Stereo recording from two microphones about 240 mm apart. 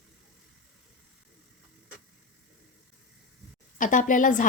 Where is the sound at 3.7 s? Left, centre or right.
Left.